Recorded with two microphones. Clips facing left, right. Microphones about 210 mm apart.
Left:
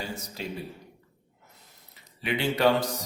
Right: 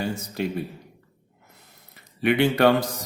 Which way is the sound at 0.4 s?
60° right (ahead or behind).